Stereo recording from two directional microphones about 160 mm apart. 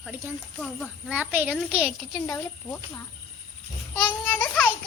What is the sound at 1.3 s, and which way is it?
Speech, 10° right (ahead or behind).